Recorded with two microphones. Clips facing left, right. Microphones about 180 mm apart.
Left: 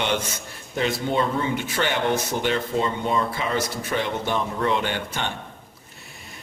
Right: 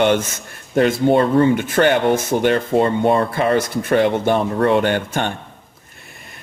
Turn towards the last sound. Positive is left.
turn(degrees=-50)  # may be behind; listen again after turning